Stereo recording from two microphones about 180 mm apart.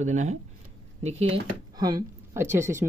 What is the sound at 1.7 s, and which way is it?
A woman's voice, 20° right (ahead or behind).